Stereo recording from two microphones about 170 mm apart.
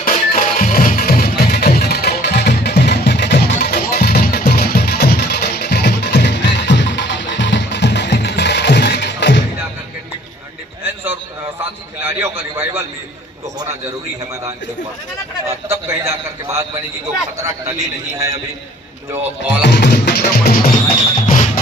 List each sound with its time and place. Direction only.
0.0 s music: 55° left (ahead or behind); by 9.4 s 90° left
10.8 s a sound: 10° right (ahead or behind)
15.4 s a man's voice: 15° right (ahead or behind)
19.6 s music: 85° left; by 20.6 s 65° left (ahead or behind)
20.7 s music: 45° left (ahead or behind)